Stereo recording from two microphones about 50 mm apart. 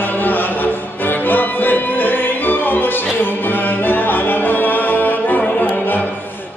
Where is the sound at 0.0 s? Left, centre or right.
Left.